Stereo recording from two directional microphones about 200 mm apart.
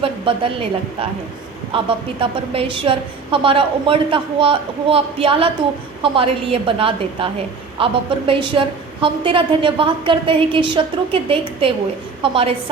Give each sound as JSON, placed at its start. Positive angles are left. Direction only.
{"t": 0.3, "sound": "a woman's voice", "side_deg": -25}
{"t": 1.7, "sound": "a woman's voice", "side_deg": -30}